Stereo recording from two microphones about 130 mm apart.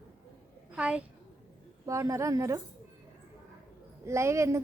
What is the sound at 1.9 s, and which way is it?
Speech, 25° right (ahead or behind).